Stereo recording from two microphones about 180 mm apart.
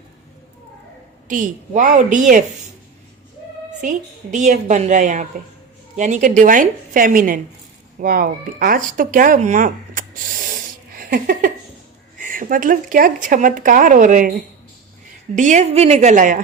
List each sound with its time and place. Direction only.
1.3 s speech: 45° right (ahead or behind)
3.8 s a woman's voice: 45° right (ahead or behind)